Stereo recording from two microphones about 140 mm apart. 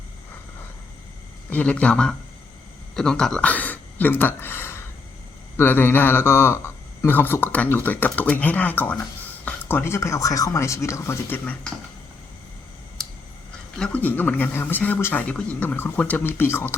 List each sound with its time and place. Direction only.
1.5 s a man's voice: 10° left (ahead or behind)
13.7 s a man's voice: 10° left (ahead or behind)